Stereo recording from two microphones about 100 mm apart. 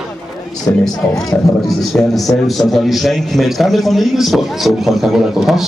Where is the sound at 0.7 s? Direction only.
35° left (ahead or behind).